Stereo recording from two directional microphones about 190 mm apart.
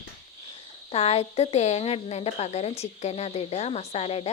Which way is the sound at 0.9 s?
30° left (ahead or behind).